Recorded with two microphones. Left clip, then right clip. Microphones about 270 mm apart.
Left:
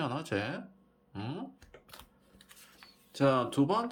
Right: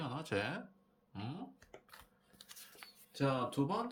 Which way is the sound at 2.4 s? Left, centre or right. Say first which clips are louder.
Right 1 dB; right.